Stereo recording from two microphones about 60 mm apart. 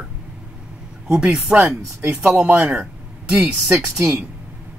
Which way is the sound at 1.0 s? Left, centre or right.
Centre.